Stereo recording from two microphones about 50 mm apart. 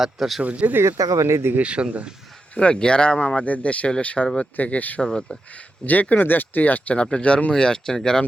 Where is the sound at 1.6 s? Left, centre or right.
Right.